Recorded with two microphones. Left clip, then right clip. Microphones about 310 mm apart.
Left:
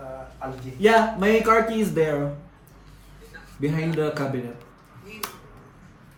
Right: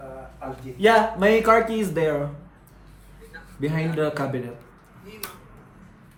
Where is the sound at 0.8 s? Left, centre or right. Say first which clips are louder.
Right 1 dB; centre.